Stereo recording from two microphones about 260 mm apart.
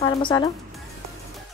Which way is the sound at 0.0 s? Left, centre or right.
Centre.